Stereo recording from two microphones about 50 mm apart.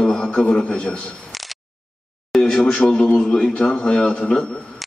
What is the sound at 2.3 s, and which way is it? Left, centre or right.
Speech, centre.